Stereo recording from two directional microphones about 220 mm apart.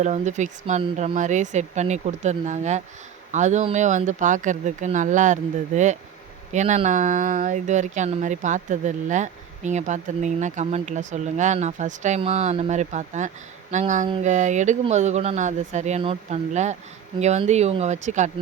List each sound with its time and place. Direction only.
0.0 s speech: 30° right (ahead or behind)